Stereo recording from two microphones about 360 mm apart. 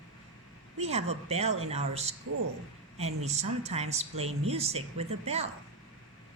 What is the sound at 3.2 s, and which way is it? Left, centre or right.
Speech, centre.